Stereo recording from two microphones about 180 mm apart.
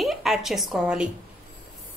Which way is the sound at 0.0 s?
Centre (ahead or behind).